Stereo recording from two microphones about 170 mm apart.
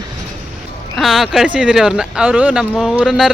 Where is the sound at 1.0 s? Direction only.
Centre (ahead or behind).